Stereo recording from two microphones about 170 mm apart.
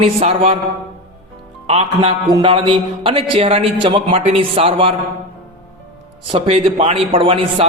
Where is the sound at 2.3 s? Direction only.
25° right (ahead or behind).